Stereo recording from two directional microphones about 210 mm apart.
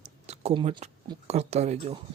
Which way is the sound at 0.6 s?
30° right (ahead or behind).